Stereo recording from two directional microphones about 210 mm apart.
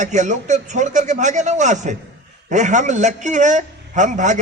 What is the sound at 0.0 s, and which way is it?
A man's voice, 35° right (ahead or behind).